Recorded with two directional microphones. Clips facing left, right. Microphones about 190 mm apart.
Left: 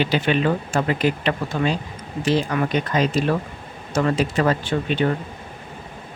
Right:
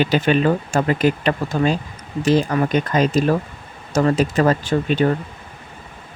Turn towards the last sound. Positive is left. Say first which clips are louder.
# right 3 dB
turn(degrees=-40)  # may be behind; listen again after turning